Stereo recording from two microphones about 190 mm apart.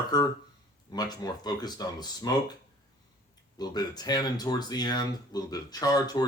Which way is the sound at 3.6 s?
20° left (ahead or behind).